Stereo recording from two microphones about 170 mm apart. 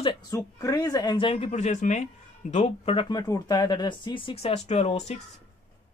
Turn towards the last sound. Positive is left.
turn(degrees=40)  # may be behind; listen again after turning